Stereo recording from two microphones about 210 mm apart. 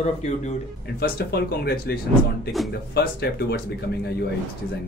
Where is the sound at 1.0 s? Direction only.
50° left (ahead or behind).